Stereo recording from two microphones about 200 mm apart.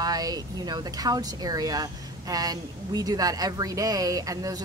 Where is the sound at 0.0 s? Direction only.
20° right (ahead or behind).